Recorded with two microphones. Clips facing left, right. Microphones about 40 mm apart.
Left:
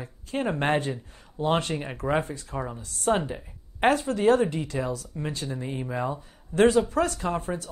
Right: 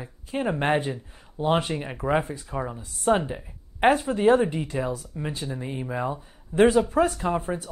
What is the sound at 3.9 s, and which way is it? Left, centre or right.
Speech, centre.